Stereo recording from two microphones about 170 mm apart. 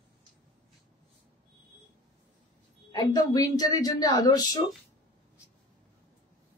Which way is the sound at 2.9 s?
20° left (ahead or behind).